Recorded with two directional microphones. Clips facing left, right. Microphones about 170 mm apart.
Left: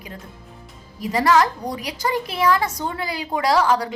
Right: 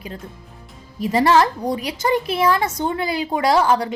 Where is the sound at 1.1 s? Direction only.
30° right (ahead or behind).